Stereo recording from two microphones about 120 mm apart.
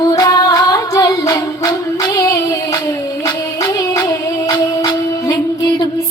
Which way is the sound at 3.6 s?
30° left (ahead or behind).